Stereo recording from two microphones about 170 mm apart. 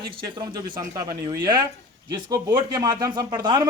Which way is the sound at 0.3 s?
25° right (ahead or behind).